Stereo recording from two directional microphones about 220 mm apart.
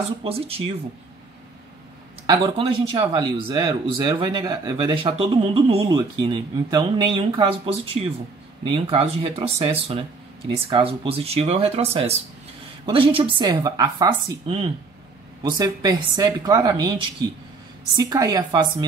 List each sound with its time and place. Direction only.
0.2 s speech: 25° right (ahead or behind)
2.2 s speech: 25° right (ahead or behind)